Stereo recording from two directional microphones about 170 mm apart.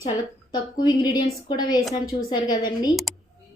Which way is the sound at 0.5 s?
25° left (ahead or behind).